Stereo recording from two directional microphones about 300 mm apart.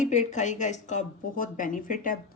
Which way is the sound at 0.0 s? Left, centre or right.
Left.